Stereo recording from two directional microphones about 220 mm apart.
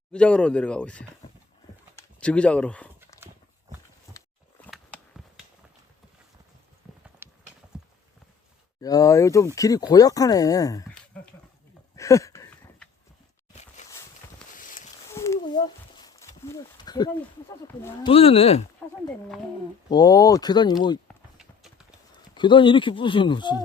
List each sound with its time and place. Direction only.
0.1 s speech: 5° left (ahead or behind)
4.6 s a sound: 5° left (ahead or behind)
7.2 s clip-clop: 10° right (ahead or behind)
8.8 s speech: 15° left (ahead or behind)
11.1 s dog: 5° left (ahead or behind)
11.9 s a sound: 15° left (ahead or behind)
14.6 s a sound: 35° left (ahead or behind)
15.1 s a sound: 15° left (ahead or behind)
18.0 s speech: 25° left (ahead or behind)
18.8 s speech: 5° left (ahead or behind)
19.9 s speech: 15° left (ahead or behind)
21.3 s clip-clop: centre (ahead or behind)
22.4 s speech: 20° left (ahead or behind)